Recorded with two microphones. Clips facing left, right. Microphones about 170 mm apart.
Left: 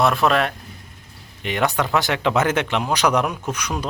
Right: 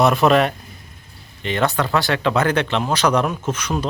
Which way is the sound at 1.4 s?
15° left (ahead or behind).